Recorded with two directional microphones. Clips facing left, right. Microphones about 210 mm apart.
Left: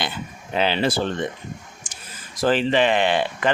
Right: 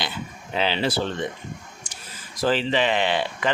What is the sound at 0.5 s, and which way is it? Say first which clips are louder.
Speech: left 3 dB; 50° left (ahead or behind).